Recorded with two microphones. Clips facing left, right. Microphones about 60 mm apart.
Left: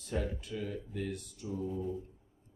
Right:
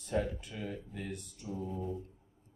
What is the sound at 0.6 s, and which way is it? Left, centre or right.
Speech, centre.